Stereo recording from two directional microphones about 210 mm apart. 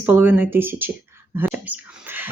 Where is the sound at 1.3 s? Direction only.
10° right (ahead or behind).